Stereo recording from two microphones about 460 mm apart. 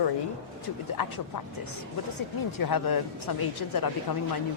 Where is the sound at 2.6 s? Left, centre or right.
Left.